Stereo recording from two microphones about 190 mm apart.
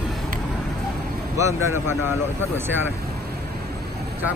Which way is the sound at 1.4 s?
15° right (ahead or behind).